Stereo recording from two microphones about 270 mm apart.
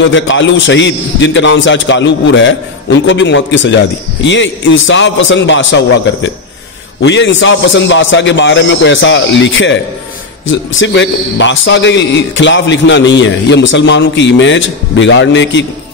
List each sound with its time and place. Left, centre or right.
0.1 s a man's voice: left